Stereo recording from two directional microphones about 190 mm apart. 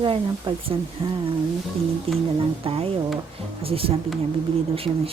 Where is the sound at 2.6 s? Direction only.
30° right (ahead or behind).